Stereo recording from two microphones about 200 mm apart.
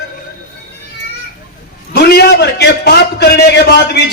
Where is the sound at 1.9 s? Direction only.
55° left (ahead or behind).